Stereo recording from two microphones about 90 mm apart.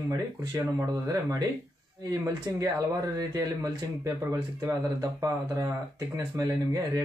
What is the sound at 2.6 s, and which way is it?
Speech, 40° right (ahead or behind).